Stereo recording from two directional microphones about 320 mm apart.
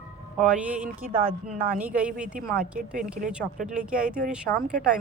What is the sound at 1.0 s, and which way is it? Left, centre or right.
Speech, right.